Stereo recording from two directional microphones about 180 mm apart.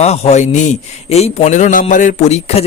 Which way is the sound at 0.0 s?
35° left (ahead or behind).